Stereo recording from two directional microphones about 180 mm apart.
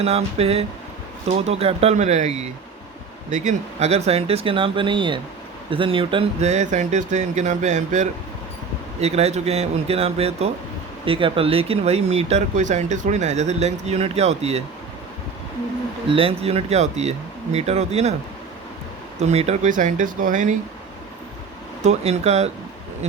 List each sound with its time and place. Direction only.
0.0 s speech: 35° right (ahead or behind)
16.0 s speech: 30° right (ahead or behind)
19.2 s speech: 35° right (ahead or behind)
21.8 s speech: 35° right (ahead or behind)